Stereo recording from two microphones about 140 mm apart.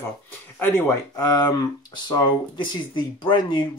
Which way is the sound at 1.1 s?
25° left (ahead or behind).